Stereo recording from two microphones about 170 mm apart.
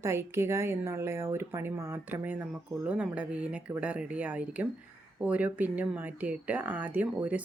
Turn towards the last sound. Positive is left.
turn(degrees=-10)  # may be behind; listen again after turning